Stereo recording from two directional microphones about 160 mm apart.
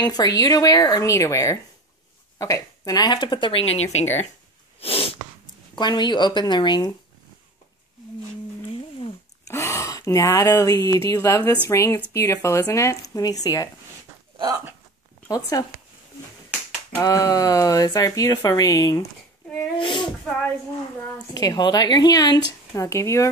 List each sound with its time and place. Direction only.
0.0 s speech: 25° left (ahead or behind); by 4.3 s 45° left (ahead or behind)
4.7 s sneeze: 35° left (ahead or behind)
5.8 s speech: 25° left (ahead or behind)
9.5 s speech: 15° left (ahead or behind)
15.2 s speech: 20° left (ahead or behind)
16.9 s speech: 20° left (ahead or behind)
21.3 s speech: 25° left (ahead or behind)